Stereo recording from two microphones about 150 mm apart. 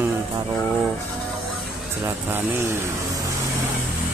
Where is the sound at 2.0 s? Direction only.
15° right (ahead or behind).